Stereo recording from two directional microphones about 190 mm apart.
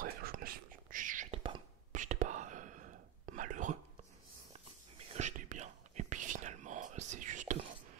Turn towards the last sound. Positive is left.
turn(degrees=-40)  # may be behind; listen again after turning